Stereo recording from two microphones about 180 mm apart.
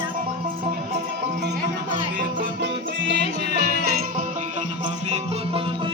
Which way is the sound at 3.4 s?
55° right (ahead or behind).